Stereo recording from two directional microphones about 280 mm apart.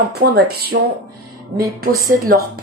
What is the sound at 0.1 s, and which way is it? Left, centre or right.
Speech, right.